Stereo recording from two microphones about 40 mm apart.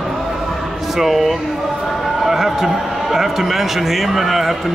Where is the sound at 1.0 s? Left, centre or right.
Centre.